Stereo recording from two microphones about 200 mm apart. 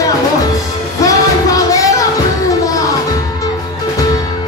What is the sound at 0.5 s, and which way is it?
Music, 15° left (ahead or behind).